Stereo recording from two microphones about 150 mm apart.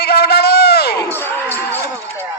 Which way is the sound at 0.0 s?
90° left.